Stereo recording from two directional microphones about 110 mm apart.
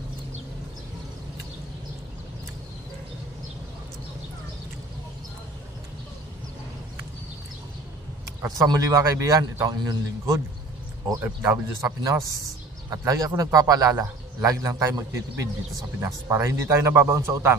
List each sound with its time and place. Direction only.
8.5 s a man's voice: 30° right (ahead or behind)
11.1 s speech: 15° right (ahead or behind)
11.8 s a man's voice: 30° right (ahead or behind)
16.0 s a man's voice: 25° right (ahead or behind)